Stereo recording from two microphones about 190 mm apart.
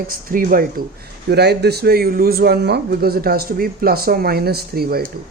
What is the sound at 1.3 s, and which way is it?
A man's voice, 60° right (ahead or behind).